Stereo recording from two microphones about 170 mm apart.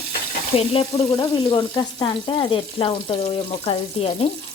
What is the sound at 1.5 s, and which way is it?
Frying, 25° left (ahead or behind).